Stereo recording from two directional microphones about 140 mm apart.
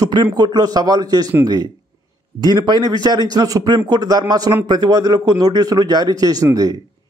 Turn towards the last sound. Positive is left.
turn(degrees=-25)  # may be behind; listen again after turning